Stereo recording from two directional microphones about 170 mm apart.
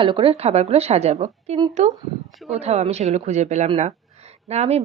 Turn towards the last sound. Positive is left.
turn(degrees=-40)  # may be behind; listen again after turning